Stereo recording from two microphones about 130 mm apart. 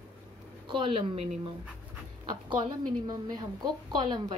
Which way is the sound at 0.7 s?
40° right (ahead or behind).